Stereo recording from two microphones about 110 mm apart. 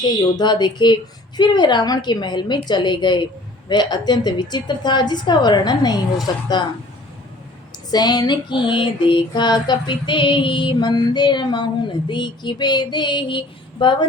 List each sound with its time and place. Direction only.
0.0 s a woman's voice: 40° left (ahead or behind)
1.4 s female singing: 40° left (ahead or behind)
3.7 s a woman's voice: 40° left (ahead or behind)
7.9 s female singing: 40° left (ahead or behind)